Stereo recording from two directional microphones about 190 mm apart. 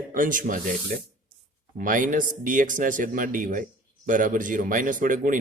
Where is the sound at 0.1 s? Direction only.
45° right (ahead or behind).